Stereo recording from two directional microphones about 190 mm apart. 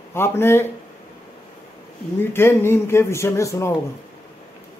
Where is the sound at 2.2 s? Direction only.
10° left (ahead or behind).